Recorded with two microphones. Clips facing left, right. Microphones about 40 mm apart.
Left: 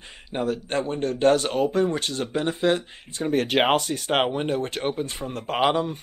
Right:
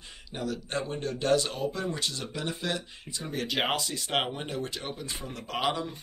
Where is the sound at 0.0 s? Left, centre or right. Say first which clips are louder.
Left 8 dB; left.